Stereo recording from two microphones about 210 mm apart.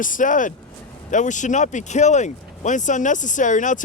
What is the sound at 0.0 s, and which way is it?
Speech, 40° left (ahead or behind).